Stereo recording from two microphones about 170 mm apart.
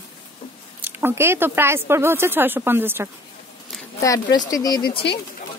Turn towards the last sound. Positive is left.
turn(degrees=25)  # may be behind; listen again after turning